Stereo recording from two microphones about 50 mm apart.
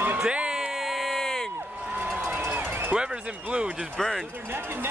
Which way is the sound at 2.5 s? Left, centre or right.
Right.